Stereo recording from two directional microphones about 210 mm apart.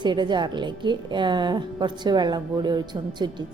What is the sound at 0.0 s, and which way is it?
A woman's voice, 20° right (ahead or behind).